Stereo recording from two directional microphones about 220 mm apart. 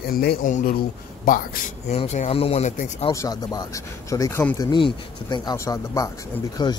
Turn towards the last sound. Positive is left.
turn(degrees=20)  # may be behind; listen again after turning